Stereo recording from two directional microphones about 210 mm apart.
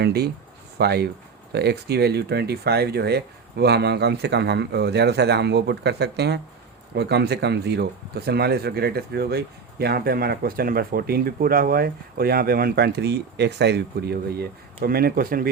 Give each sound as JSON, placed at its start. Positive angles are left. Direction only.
{"t": 0.0, "sound": "speech", "side_deg": -50}